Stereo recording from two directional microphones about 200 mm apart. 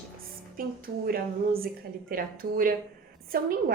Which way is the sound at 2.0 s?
45° right (ahead or behind).